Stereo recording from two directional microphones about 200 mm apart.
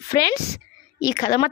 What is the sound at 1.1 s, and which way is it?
Speech, 50° left (ahead or behind).